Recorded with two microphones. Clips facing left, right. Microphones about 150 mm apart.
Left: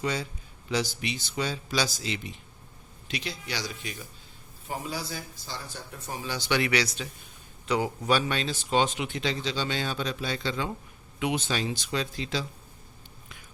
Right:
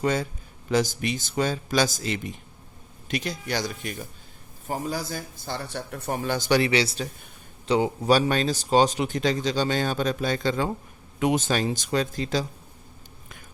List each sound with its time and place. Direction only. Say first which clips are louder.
0.0 s speech: right 6 dB; 50° right (ahead or behind)
6.6 s speech: right 4 dB; 30° right (ahead or behind)
8.1 s speech: right 6 dB; 40° right (ahead or behind)